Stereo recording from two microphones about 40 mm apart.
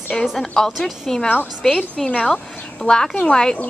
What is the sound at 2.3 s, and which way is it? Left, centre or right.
A woman's voice, centre.